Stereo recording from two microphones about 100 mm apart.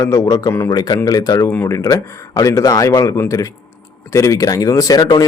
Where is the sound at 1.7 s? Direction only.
30° left (ahead or behind).